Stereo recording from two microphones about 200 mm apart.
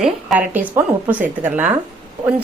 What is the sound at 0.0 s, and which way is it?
A woman's voice, 5° right (ahead or behind).